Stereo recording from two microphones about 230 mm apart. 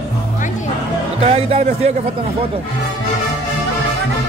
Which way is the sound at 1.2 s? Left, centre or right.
Right.